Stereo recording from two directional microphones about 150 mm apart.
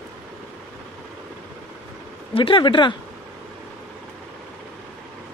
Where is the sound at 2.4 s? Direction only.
35° left (ahead or behind).